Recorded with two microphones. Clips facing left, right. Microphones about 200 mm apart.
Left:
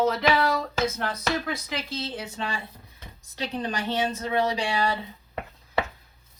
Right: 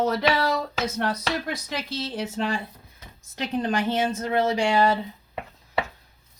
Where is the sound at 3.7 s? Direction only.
50° right (ahead or behind).